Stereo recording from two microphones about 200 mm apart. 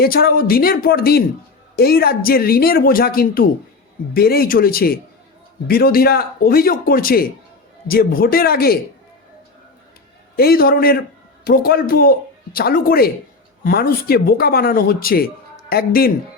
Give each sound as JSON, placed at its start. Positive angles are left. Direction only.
{"t": 0.0, "sound": "a woman's voice", "side_deg": 50}
{"t": 10.3, "sound": "a woman's voice", "side_deg": 50}